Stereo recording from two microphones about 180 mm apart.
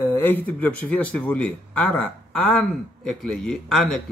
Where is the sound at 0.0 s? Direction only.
10° left (ahead or behind).